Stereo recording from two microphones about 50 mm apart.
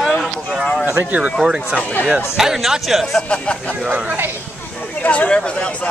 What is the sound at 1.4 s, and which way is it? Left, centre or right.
Speech, centre.